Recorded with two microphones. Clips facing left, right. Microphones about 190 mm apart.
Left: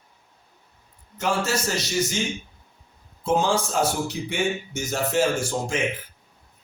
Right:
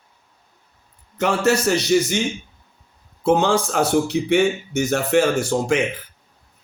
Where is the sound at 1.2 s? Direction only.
65° right (ahead or behind).